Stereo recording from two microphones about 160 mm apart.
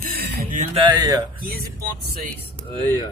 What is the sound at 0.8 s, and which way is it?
Speech, 25° right (ahead or behind).